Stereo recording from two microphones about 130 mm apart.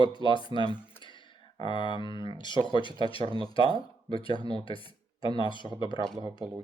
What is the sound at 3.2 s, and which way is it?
Speech, 40° right (ahead or behind).